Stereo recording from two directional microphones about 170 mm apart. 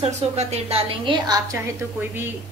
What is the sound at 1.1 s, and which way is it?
Speech, 30° right (ahead or behind).